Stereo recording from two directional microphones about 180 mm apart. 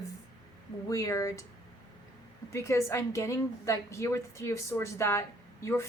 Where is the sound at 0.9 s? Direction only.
20° left (ahead or behind).